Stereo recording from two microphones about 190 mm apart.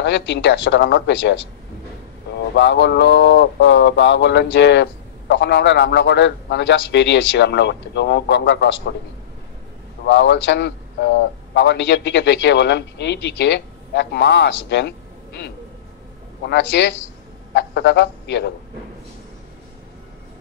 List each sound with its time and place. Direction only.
0.0 s a man's voice: 65° left (ahead or behind)
2.5 s a man's voice: 65° left (ahead or behind)
10.0 s a man's voice: 65° left (ahead or behind)